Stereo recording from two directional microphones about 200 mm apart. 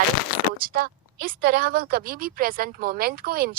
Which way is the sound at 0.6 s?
45° right (ahead or behind).